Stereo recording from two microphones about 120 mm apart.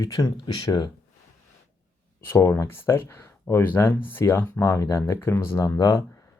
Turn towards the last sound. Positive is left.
turn(degrees=25)  # may be behind; listen again after turning